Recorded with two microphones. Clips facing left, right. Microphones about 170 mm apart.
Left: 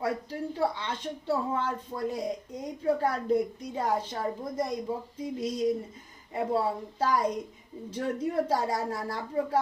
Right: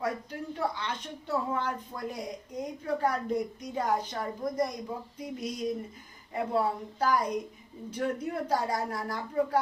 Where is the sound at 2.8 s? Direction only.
30° left (ahead or behind).